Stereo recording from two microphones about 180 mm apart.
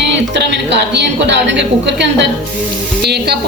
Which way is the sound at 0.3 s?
70° right (ahead or behind).